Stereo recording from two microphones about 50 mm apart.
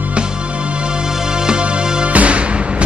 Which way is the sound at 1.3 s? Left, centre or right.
Centre.